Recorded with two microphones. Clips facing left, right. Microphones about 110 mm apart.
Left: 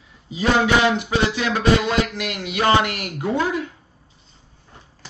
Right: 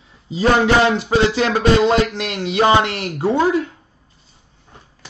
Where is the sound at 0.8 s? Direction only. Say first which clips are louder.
Right 4 dB; 30° right (ahead or behind).